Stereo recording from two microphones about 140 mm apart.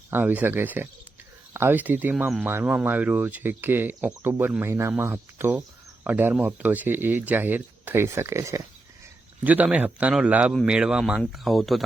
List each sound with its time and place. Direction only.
0.1 s speech: 15° right (ahead or behind)